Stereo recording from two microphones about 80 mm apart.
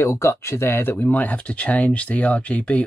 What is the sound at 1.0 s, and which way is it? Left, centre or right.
Speech, centre.